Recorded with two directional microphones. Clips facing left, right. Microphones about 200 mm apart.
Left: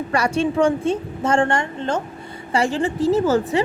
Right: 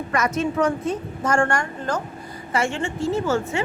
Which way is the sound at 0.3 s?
30° left (ahead or behind).